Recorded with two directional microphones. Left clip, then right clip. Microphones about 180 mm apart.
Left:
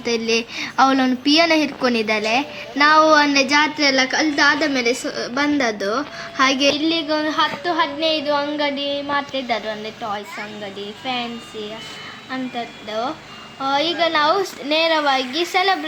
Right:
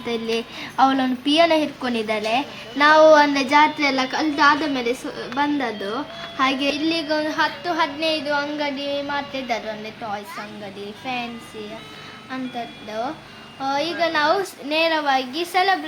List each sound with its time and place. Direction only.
0.0 s a woman's voice: 15° left (ahead or behind)
6.7 s a woman's voice: 5° left (ahead or behind)
12.3 s a woman's voice: 5° left (ahead or behind)